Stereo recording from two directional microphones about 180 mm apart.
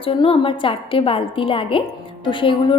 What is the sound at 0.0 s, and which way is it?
A woman's voice, 30° left (ahead or behind).